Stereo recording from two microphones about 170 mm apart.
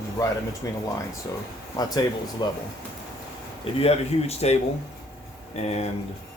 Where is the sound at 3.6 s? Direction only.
35° left (ahead or behind).